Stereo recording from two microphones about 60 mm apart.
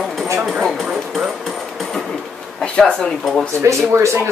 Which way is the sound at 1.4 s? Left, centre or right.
Centre.